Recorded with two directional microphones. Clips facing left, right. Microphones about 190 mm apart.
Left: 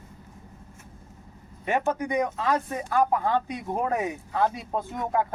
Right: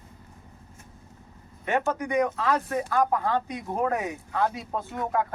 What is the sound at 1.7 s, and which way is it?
A man's voice, 15° left (ahead or behind).